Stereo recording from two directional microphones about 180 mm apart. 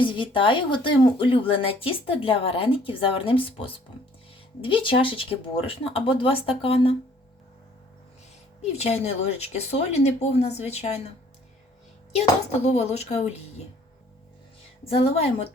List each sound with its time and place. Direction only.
0.0 s speech: 30° left (ahead or behind)
8.7 s speech: 35° left (ahead or behind)
12.5 s speech: 35° left (ahead or behind)
14.8 s speech: 35° left (ahead or behind)